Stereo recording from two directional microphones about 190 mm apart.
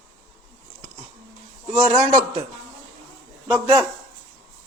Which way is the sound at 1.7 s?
30° right (ahead or behind).